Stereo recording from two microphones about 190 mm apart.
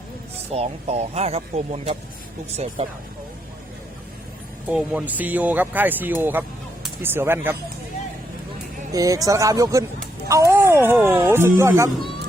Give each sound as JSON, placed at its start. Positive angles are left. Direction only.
{"t": 0.5, "sound": "speech", "side_deg": -35}
{"t": 4.7, "sound": "speech", "side_deg": -5}
{"t": 8.9, "sound": "speech", "side_deg": -20}